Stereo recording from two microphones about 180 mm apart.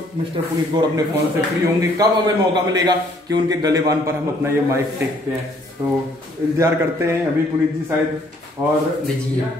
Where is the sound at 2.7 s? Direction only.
20° right (ahead or behind).